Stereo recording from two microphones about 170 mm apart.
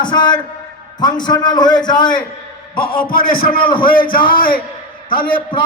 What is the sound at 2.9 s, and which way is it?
A man's voice, 55° left (ahead or behind).